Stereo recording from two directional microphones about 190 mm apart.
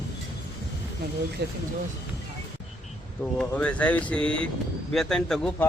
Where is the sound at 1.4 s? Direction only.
60° right (ahead or behind).